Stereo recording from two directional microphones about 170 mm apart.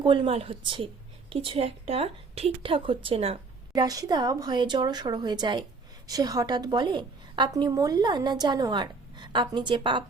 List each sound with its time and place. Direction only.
0.0 s a woman's voice: 30° right (ahead or behind)
3.8 s a woman's voice: 20° right (ahead or behind)